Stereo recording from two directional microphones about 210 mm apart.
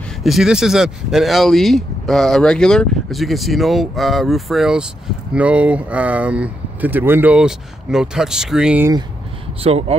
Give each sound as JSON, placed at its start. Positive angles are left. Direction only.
{"t": 0.2, "sound": "speech", "side_deg": 0}
{"t": 9.6, "sound": "speech", "side_deg": -30}